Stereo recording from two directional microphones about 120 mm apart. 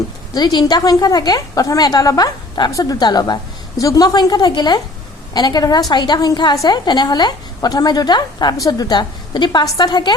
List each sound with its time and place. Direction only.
0.3 s a woman's voice: 35° left (ahead or behind)